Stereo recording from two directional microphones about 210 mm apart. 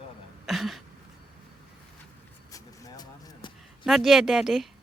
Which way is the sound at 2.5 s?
15° left (ahead or behind).